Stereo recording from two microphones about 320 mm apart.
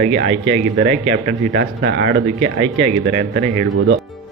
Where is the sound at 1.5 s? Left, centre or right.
Right.